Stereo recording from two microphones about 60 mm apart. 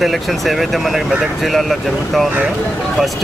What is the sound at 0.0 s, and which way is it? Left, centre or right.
A man's voice, centre.